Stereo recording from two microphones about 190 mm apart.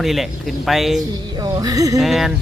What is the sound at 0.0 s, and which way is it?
Speech, centre (ahead or behind).